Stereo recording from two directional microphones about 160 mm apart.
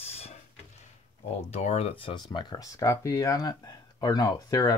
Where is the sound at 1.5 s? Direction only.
40° left (ahead or behind).